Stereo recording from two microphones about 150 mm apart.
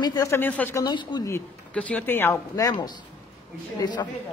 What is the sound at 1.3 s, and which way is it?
A man's voice, 10° left (ahead or behind).